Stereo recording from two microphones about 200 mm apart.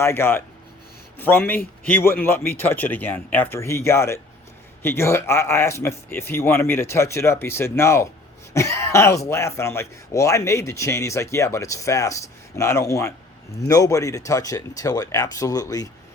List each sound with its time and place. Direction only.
0.0 s speech: 10° left (ahead or behind)